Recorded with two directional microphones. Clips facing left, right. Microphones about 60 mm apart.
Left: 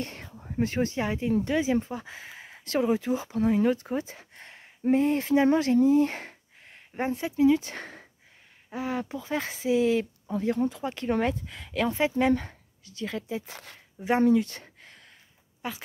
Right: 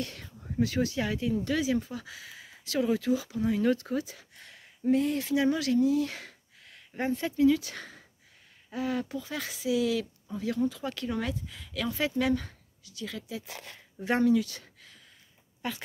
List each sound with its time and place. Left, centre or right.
0.0 s whispering: left
0.6 s speech: left
2.8 s speech: left
3.6 s speech: left
8.6 s speech: left
11.1 s speech: left
14.2 s a sound: left